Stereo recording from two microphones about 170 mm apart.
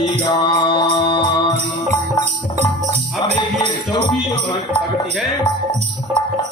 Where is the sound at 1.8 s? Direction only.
40° right (ahead or behind).